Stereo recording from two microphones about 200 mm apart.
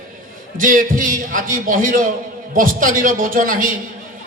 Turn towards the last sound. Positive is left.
turn(degrees=-40)  # may be behind; listen again after turning